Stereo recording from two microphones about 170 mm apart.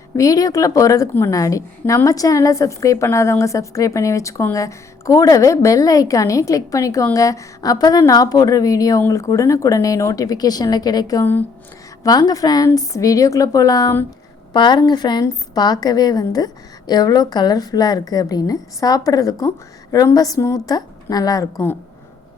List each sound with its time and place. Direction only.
0.2 s a woman's voice: 20° left (ahead or behind)